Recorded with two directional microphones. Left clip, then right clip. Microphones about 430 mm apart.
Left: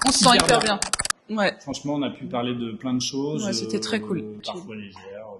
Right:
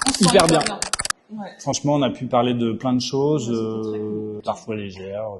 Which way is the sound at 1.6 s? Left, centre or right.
Right.